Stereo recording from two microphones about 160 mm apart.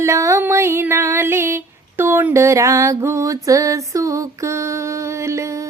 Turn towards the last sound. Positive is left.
turn(degrees=-20)  # may be behind; listen again after turning